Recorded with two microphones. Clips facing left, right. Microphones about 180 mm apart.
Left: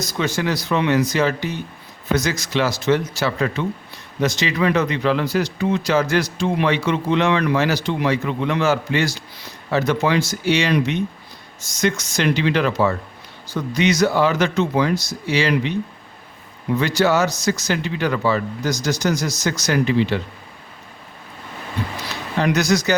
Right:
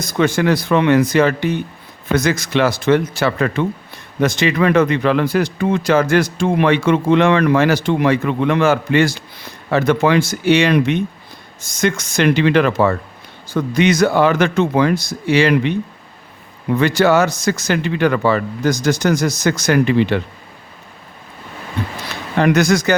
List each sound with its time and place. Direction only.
0.0 s speech: 55° right (ahead or behind)
16.7 s speech: 55° right (ahead or behind)
22.4 s speech: 55° right (ahead or behind)